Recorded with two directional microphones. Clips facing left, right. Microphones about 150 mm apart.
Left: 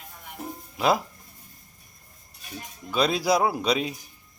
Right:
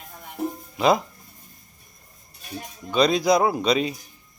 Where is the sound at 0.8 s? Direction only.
5° left (ahead or behind).